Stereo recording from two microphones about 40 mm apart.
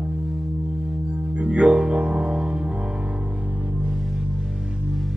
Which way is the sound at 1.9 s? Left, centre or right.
Right.